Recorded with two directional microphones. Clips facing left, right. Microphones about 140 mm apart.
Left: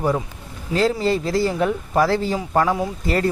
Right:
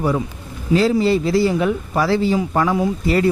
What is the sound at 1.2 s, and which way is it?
Speech, 45° left (ahead or behind).